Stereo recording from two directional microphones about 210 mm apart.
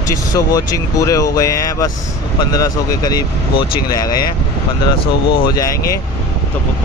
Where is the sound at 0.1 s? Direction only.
15° left (ahead or behind).